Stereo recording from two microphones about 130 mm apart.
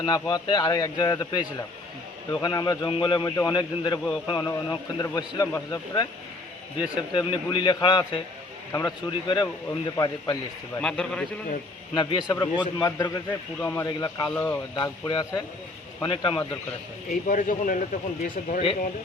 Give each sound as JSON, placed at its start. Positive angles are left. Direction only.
{"t": 0.0, "sound": "a man's voice", "side_deg": 30}
{"t": 3.2, "sound": "a man's voice", "side_deg": 25}
{"t": 10.8, "sound": "a man's voice", "side_deg": 5}
{"t": 11.9, "sound": "a man's voice", "side_deg": 35}
{"t": 13.6, "sound": "speech", "side_deg": 15}
{"t": 13.8, "sound": "a man's voice", "side_deg": 30}
{"t": 14.3, "sound": "speech", "side_deg": 15}
{"t": 14.8, "sound": "a man's voice", "side_deg": 35}
{"t": 17.1, "sound": "speech", "side_deg": 85}